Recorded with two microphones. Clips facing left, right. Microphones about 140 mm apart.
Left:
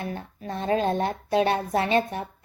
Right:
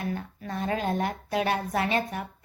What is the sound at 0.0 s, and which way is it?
A woman's voice, 25° left (ahead or behind).